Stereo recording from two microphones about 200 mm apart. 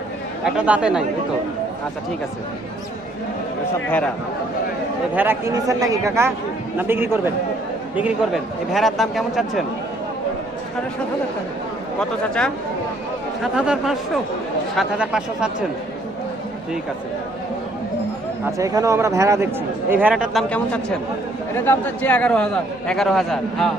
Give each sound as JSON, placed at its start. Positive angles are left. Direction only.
{"t": 0.4, "sound": "a man's voice", "side_deg": -5}
{"t": 5.1, "sound": "a man's voice", "side_deg": -10}
{"t": 11.9, "sound": "a man's voice", "side_deg": 5}
{"t": 18.4, "sound": "a man's voice", "side_deg": -15}